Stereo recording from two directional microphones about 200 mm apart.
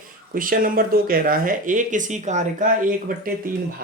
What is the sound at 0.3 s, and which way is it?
Speech, 45° right (ahead or behind).